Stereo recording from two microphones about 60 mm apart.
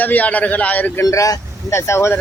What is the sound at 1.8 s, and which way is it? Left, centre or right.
Speech, left.